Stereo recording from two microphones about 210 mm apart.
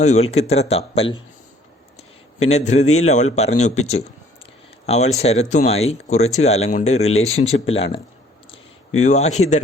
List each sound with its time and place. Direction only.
0.0 s speech: 30° left (ahead or behind)
2.5 s speech: 30° left (ahead or behind)
2.8 s a man's voice: 90° left
3.1 s speech: 30° left (ahead or behind)
4.9 s speech: 30° left (ahead or behind)
9.0 s speech: 30° left (ahead or behind)